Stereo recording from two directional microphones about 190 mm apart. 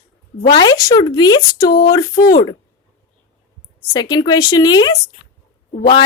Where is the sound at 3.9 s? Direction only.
25° left (ahead or behind).